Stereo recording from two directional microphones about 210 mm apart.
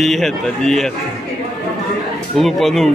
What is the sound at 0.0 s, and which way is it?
Speech, centre (ahead or behind).